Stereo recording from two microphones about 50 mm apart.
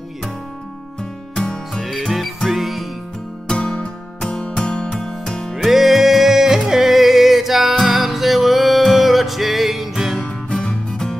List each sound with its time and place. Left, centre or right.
1.3 s music: centre
1.7 s music: centre
3.4 s music: centre
5.5 s music: centre
10.2 s music: centre